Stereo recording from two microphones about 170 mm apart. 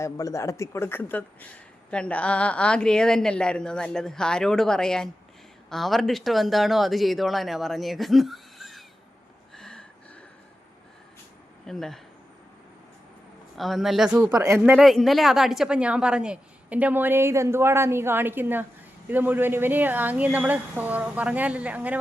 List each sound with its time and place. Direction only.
0.0 s a woman's voice: 20° left (ahead or behind); by 8.8 s centre (ahead or behind)
9.6 s a sound: 5° left (ahead or behind)
11.6 s speech: centre (ahead or behind)
13.6 s a woman's voice: centre (ahead or behind)
14.2 s speech: 15° right (ahead or behind)
14.6 s speech: 5° right (ahead or behind)